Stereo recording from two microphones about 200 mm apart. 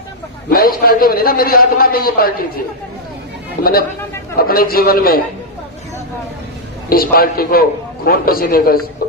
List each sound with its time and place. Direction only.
0.5 s a man's voice: 50° left (ahead or behind)
3.6 s a man's voice: 50° left (ahead or behind)
6.9 s a man's voice: 45° left (ahead or behind)
9.0 s music: 50° left (ahead or behind)